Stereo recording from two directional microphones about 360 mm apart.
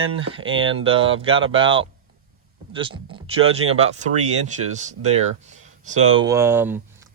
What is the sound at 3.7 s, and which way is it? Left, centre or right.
Speech, centre.